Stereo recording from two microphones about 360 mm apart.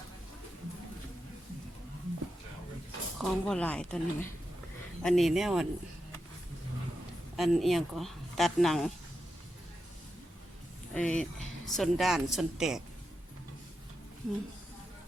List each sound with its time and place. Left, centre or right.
3.2 s speech: centre
7.3 s speech: centre
10.9 s speech: centre